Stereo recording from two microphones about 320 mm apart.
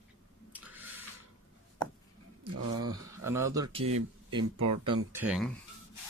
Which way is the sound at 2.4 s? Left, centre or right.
Centre.